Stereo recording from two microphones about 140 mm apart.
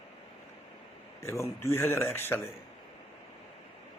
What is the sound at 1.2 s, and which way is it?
Speech, 20° left (ahead or behind).